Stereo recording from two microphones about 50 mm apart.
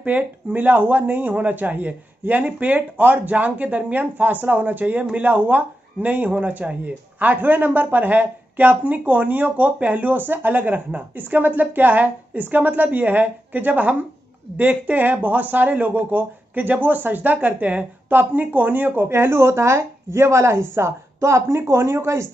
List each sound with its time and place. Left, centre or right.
0.0 s speech: right